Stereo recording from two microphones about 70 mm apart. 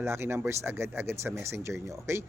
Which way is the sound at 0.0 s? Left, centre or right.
Right.